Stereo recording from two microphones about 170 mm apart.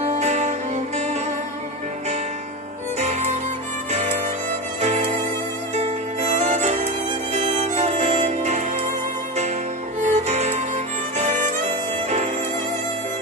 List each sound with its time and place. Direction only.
0.0 s music: 45° right (ahead or behind)
3.0 s music: 40° right (ahead or behind)
4.8 s music: 40° right (ahead or behind)
10.0 s music: 40° right (ahead or behind)
11.1 s violin: 45° right (ahead or behind)